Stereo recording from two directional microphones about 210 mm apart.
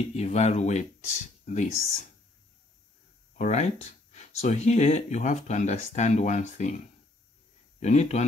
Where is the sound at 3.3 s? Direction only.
35° left (ahead or behind).